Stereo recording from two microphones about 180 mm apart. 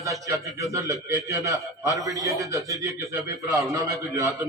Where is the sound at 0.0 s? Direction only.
20° right (ahead or behind).